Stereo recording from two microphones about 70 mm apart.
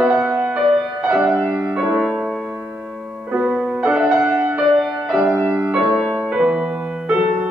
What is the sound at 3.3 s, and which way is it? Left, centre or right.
Music, centre.